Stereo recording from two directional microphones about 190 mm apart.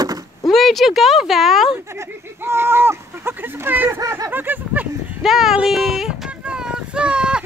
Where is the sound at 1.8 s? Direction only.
15° right (ahead or behind).